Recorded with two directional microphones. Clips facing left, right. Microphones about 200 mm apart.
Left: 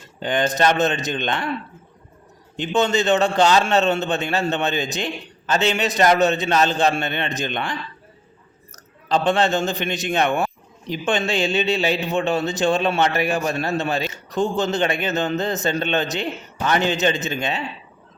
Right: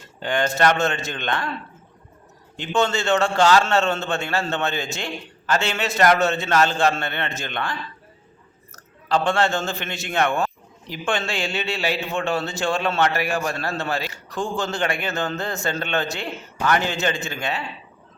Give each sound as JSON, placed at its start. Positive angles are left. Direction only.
{"t": 0.2, "sound": "a man's voice", "side_deg": 20}
{"t": 2.6, "sound": "a man's voice", "side_deg": 20}